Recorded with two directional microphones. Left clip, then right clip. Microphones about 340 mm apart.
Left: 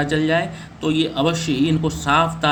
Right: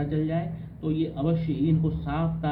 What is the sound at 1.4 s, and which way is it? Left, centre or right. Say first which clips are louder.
Speech: left 9 dB; left.